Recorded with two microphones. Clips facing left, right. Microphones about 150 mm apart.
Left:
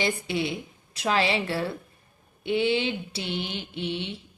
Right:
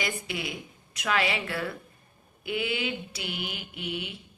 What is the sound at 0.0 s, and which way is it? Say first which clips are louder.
Mantra: left 6 dB; 30° left (ahead or behind).